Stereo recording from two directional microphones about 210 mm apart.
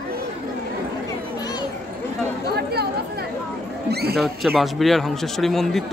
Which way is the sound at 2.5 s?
50° right (ahead or behind).